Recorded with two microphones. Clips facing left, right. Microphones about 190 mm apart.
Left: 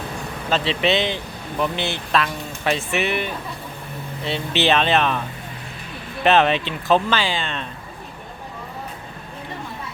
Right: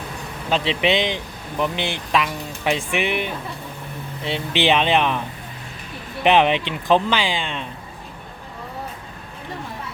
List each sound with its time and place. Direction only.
0.5 s speech: 15° right (ahead or behind)
6.2 s speech: 15° right (ahead or behind)